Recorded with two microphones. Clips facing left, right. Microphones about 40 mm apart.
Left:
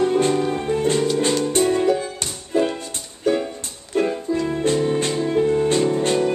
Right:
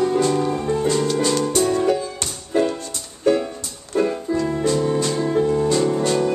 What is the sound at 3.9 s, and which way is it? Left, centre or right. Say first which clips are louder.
Music: even; left.